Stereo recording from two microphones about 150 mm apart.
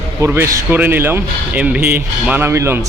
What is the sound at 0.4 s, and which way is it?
Speech, 15° right (ahead or behind).